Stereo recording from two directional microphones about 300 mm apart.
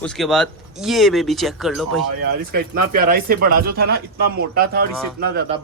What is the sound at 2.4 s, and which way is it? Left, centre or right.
Speech, right.